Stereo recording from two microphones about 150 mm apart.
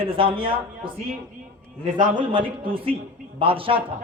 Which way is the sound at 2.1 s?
35° right (ahead or behind).